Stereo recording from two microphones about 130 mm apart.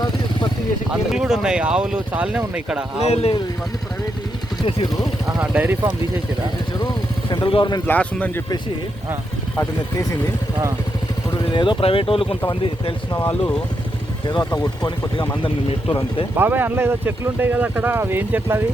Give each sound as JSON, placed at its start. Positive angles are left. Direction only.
{"t": 0.0, "sound": "a sound", "side_deg": 35}
{"t": 0.9, "sound": "speech", "side_deg": -5}
{"t": 3.1, "sound": "speech", "side_deg": 50}
{"t": 5.4, "sound": "speech", "side_deg": -10}
{"t": 6.7, "sound": "vehicle", "side_deg": 35}
{"t": 7.9, "sound": "speech", "side_deg": 15}
{"t": 9.6, "sound": "speech", "side_deg": 25}
{"t": 11.4, "sound": "speech", "side_deg": 40}
{"t": 13.1, "sound": "speech", "side_deg": 20}
{"t": 14.3, "sound": "speech", "side_deg": 40}
{"t": 16.3, "sound": "speech", "side_deg": -15}